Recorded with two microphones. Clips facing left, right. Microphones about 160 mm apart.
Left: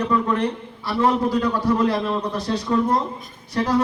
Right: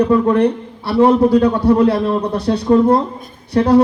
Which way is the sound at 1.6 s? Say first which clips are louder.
Right 7 dB; 65° right (ahead or behind).